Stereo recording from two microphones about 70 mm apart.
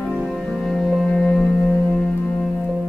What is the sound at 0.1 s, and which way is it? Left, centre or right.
Music, centre.